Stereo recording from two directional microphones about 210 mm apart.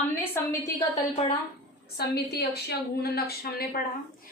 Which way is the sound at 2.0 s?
50° left (ahead or behind).